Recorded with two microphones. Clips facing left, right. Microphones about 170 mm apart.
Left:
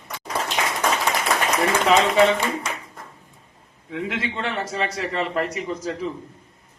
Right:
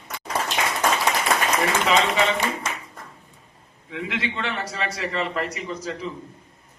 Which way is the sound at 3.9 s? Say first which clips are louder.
Left 1 dB; 45° left (ahead or behind).